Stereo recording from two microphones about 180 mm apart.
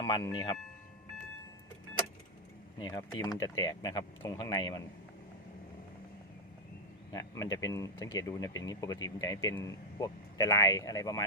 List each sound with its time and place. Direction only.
0.0 s a man's voice: 25° left (ahead or behind)
2.7 s a man's voice: 20° left (ahead or behind)
7.1 s a man's voice: 20° left (ahead or behind)